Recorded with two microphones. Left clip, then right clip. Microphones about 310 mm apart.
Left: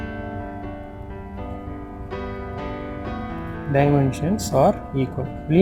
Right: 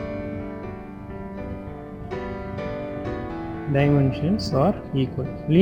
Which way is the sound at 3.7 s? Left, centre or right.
Left.